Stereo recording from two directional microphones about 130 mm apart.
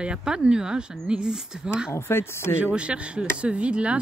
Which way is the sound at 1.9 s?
20° left (ahead or behind).